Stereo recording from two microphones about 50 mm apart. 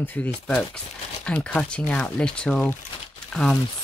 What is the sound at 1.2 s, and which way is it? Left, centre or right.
Speech, left.